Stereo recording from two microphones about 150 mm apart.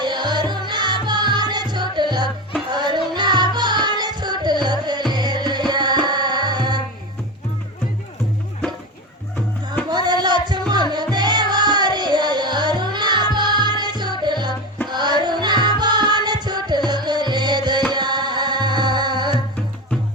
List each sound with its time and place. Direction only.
0.0 s music: 30° right (ahead or behind)
9.9 s music: 30° right (ahead or behind)